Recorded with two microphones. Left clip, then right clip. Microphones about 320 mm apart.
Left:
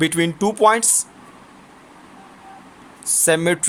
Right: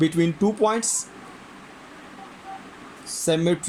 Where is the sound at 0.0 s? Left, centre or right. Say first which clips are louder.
Left 3 dB; left.